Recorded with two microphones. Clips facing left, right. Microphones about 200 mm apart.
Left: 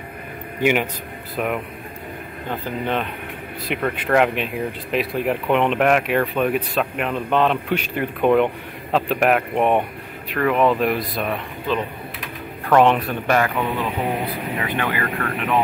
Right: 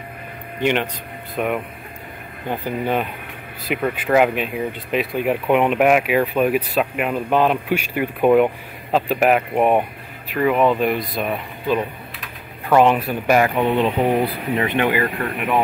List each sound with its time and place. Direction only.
0.6 s speech: 10° left (ahead or behind)
2.5 s speech: 10° right (ahead or behind)